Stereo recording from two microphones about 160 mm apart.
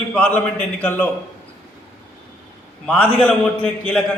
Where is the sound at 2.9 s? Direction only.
5° left (ahead or behind).